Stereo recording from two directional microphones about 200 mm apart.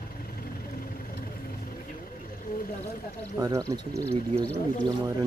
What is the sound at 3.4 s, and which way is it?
Speech, 15° right (ahead or behind).